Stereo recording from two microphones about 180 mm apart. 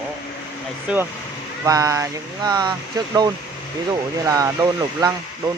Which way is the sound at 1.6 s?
20° right (ahead or behind).